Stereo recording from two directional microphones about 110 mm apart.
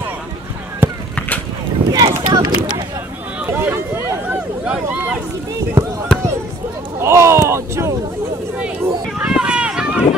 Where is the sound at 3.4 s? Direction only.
20° right (ahead or behind).